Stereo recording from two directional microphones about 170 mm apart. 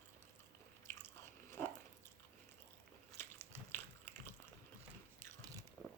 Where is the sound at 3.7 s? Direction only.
15° left (ahead or behind).